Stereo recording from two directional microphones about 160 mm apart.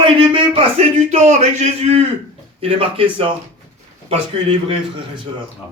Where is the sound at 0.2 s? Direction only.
35° right (ahead or behind).